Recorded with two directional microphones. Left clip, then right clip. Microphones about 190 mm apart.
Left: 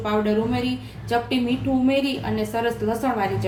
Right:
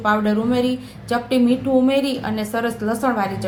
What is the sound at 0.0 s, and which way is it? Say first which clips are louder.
Speech: right 3 dB; 35° right (ahead or behind).